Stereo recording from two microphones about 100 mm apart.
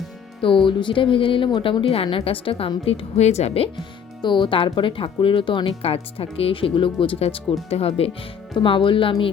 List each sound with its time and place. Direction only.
0.4 s speech: 60° left (ahead or behind)
1.8 s a woman's voice: 70° left (ahead or behind); by 3.7 s 85° left
4.2 s speech: 50° left (ahead or behind); by 7.4 s 70° left (ahead or behind)
7.7 s speech: 80° left
8.5 s speech: 60° left (ahead or behind)